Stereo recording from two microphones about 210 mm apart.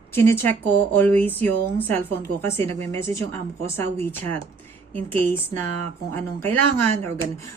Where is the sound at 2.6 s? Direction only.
25° right (ahead or behind).